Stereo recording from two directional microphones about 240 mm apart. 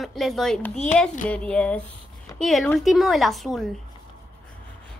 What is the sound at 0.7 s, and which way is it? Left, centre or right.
Speech, left.